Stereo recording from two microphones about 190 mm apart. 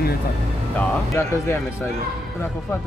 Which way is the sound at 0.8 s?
10° left (ahead or behind).